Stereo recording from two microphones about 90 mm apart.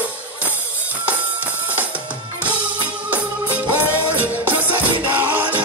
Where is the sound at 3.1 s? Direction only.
20° right (ahead or behind).